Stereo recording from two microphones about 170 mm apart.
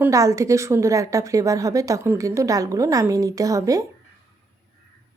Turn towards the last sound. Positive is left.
turn(degrees=-20)  # may be behind; listen again after turning